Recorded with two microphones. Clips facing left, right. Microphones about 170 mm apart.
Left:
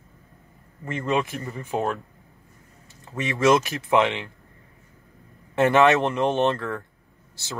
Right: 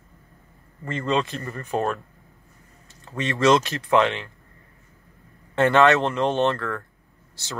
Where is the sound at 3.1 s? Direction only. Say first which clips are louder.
Right 1 dB; 10° left (ahead or behind).